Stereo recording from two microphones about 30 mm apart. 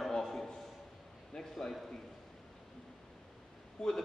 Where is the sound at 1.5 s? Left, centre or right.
Centre.